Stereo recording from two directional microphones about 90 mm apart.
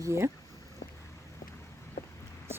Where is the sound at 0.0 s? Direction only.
30° right (ahead or behind).